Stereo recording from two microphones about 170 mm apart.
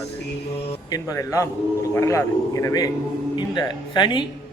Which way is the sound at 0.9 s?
20° left (ahead or behind).